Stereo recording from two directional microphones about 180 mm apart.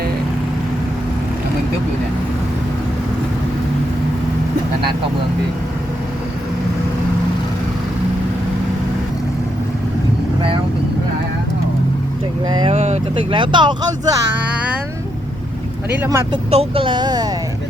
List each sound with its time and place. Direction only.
12.5 s vehicle: 25° right (ahead or behind)
12.7 s speech: 40° right (ahead or behind); by 14.2 s 25° right (ahead or behind)
16.0 s speech: 15° right (ahead or behind)
16.3 s speech: 30° right (ahead or behind)